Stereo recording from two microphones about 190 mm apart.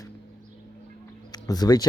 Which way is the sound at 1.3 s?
20° left (ahead or behind).